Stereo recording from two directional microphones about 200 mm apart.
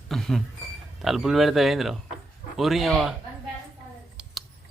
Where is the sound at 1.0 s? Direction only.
Centre (ahead or behind).